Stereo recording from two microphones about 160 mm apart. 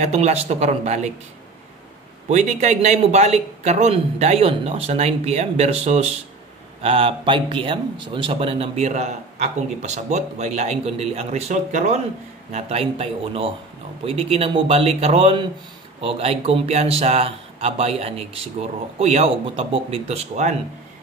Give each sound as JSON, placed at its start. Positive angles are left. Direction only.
{"t": 0.0, "sound": "a man's voice", "side_deg": -45}
{"t": 2.2, "sound": "a man's voice", "side_deg": -45}